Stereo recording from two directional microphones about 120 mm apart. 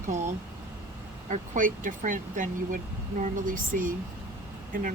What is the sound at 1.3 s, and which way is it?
Speech, 90° right.